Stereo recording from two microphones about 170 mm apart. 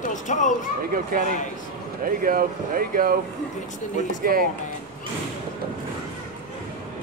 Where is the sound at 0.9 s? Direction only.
60° right (ahead or behind).